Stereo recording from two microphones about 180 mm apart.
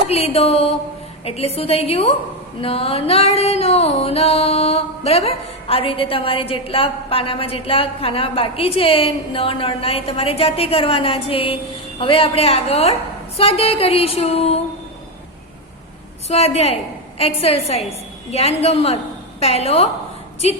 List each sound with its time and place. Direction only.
0.1 s music: 35° left (ahead or behind)
16.3 s music: 35° left (ahead or behind)